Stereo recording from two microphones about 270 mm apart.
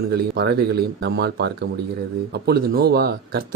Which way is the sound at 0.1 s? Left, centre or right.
Right.